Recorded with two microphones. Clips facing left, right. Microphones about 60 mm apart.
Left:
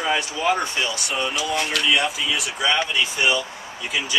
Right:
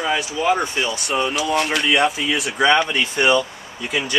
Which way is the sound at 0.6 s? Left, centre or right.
Right.